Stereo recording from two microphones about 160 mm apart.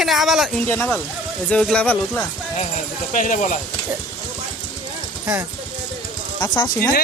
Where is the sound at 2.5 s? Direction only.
50° left (ahead or behind).